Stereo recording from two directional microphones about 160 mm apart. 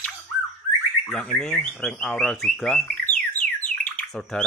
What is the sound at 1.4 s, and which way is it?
Bird, 5° left (ahead or behind).